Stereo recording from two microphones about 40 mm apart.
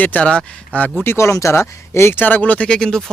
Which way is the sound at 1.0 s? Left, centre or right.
Left.